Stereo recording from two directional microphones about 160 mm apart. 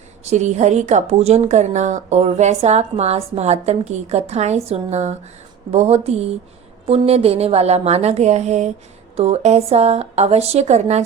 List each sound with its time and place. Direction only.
0.3 s a woman's voice: 45° right (ahead or behind)